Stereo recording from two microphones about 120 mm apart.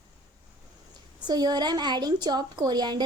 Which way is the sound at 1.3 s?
35° right (ahead or behind).